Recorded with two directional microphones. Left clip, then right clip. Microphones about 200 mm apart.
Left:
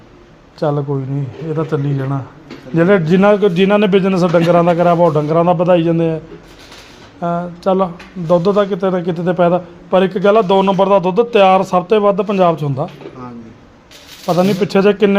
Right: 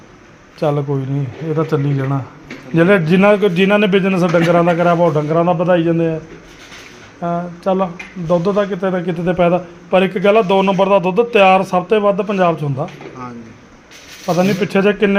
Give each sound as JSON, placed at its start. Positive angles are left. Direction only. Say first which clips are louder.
{"t": 0.6, "sound": "a man's voice", "louder": "even", "side_deg": 5}
{"t": 2.7, "sound": "a man's voice", "louder": "even", "side_deg": 5}
{"t": 7.2, "sound": "a man's voice", "louder": "left 2 dB", "side_deg": 15}
{"t": 14.3, "sound": "a man's voice", "louder": "left 2 dB", "side_deg": 15}